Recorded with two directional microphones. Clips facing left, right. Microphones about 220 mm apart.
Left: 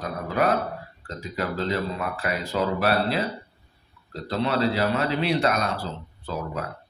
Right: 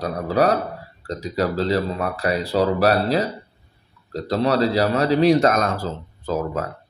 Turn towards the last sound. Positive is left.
turn(degrees=-45)  # may be behind; listen again after turning